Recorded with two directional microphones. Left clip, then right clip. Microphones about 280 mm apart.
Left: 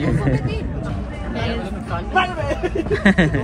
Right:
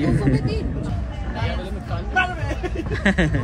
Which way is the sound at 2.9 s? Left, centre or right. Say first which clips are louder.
Left 4 dB; centre.